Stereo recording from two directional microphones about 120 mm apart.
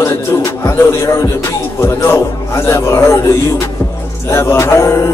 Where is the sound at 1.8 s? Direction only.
20° left (ahead or behind).